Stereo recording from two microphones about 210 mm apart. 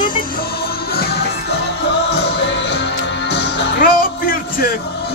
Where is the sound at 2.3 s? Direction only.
60° left (ahead or behind).